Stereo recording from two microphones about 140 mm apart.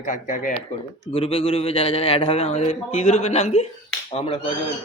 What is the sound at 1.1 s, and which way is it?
A man's voice, 40° left (ahead or behind).